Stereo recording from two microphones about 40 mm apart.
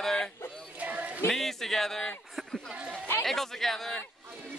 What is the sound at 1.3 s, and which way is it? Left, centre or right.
A man's voice, centre.